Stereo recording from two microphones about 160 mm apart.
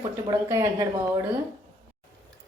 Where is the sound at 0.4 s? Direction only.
20° right (ahead or behind).